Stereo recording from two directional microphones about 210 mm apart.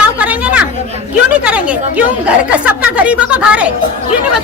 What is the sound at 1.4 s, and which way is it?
A woman's voice, 5° right (ahead or behind).